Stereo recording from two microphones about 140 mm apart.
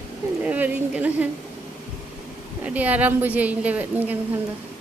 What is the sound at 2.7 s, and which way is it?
A woman's voice, 10° right (ahead or behind).